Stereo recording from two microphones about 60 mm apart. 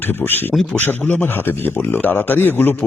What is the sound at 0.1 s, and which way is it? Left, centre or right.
Speech, left.